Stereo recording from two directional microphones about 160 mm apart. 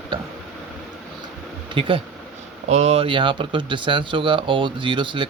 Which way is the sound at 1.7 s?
35° right (ahead or behind).